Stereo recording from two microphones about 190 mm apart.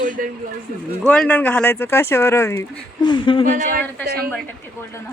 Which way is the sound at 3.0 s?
25° left (ahead or behind).